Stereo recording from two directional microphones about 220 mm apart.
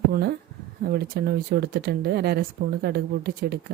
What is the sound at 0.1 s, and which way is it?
A woman's voice, 50° right (ahead or behind).